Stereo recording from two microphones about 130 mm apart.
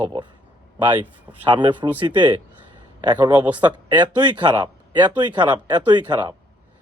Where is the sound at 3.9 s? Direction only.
35° right (ahead or behind).